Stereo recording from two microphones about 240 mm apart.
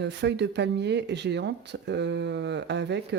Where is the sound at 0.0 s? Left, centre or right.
Right.